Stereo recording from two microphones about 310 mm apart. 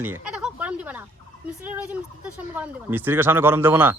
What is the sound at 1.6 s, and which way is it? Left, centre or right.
Speech, centre.